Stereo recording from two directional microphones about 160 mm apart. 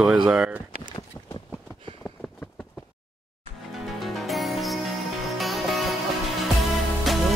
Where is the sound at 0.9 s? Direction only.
25° left (ahead or behind).